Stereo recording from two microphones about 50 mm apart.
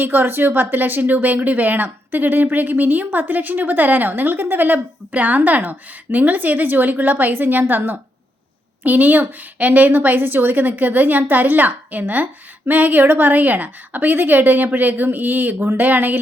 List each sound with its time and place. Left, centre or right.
0.0 s a woman's voice: right